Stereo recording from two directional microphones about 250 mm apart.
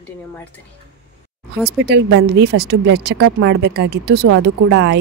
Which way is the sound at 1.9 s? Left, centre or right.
Right.